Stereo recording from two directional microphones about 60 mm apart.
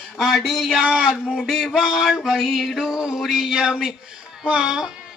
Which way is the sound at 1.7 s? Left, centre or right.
Centre.